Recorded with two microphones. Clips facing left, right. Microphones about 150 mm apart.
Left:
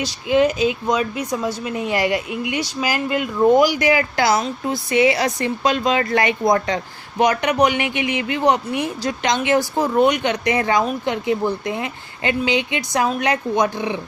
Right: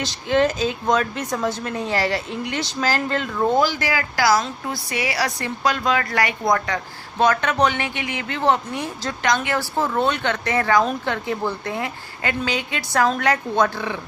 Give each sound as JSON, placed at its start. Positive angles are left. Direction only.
{"t": 0.0, "sound": "a woman's voice", "side_deg": 10}